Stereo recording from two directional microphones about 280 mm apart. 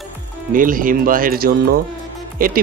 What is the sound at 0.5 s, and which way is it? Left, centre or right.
Speech, right.